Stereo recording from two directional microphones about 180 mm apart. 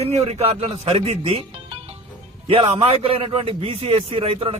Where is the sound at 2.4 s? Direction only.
30° right (ahead or behind).